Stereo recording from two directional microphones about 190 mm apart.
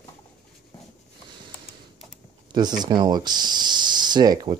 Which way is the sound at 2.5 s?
20° right (ahead or behind).